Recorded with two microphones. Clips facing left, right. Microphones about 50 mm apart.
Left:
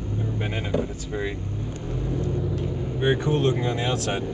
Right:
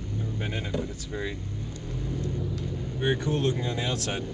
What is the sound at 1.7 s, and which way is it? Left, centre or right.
Vehicle, left.